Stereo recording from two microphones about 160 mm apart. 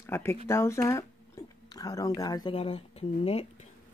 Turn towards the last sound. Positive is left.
turn(degrees=40)  # may be behind; listen again after turning